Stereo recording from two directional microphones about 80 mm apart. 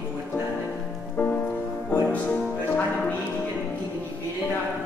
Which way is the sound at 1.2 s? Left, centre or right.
Left.